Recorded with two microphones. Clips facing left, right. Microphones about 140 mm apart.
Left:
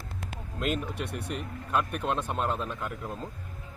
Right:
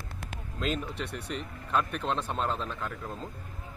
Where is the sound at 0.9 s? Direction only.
50° left (ahead or behind).